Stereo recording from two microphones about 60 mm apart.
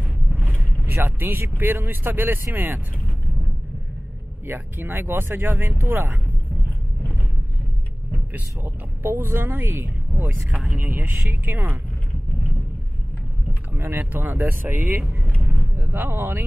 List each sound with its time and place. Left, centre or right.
0.0 s vehicle: right
1.6 s speech: right
4.5 s speech: right
8.1 s speech: right
13.7 s speech: right
15.4 s a sound: right